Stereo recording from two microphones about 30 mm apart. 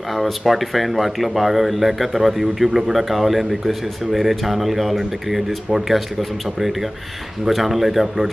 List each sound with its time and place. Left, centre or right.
0.5 s a man's voice: centre
7.4 s speech: centre